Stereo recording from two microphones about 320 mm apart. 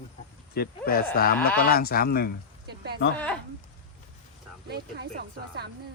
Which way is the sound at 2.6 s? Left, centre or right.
Right.